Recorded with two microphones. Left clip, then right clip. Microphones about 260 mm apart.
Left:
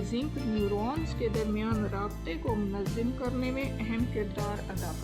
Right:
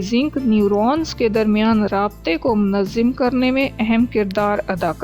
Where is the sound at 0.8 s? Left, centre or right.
Right.